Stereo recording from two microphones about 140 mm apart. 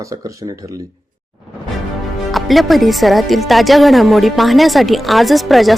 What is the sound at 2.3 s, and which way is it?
Speech, centre (ahead or behind).